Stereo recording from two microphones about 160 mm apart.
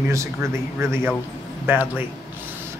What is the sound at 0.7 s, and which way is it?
Speech, 15° right (ahead or behind).